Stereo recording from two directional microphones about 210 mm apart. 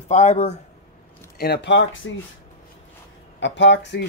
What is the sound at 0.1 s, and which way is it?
Speech, 35° left (ahead or behind).